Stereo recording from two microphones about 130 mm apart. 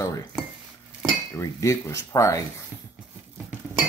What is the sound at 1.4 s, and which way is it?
Speech, 20° left (ahead or behind).